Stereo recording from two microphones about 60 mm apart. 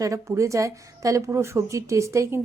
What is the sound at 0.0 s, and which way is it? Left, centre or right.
A woman's voice, right.